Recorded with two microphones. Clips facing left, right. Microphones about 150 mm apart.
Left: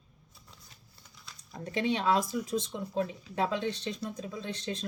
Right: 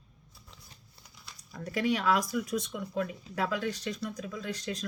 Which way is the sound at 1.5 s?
25° left (ahead or behind).